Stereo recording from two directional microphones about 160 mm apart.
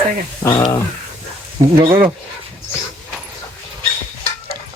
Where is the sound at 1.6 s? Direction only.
35° right (ahead or behind).